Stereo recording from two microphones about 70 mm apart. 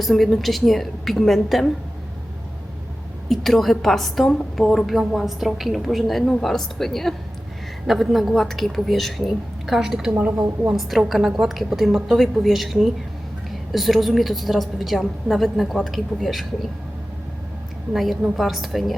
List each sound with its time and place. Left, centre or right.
0.0 s a woman's voice: centre
3.2 s a woman's voice: centre
10.8 s a woman's voice: centre
17.9 s a woman's voice: centre